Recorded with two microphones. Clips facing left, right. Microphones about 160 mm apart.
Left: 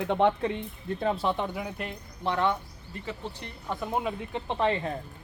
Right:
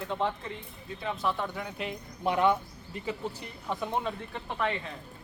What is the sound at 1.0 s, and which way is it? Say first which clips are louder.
Speech: left 4 dB; 30° left (ahead or behind).